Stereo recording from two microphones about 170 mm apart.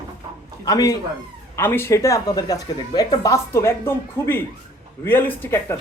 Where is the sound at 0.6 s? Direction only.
20° left (ahead or behind).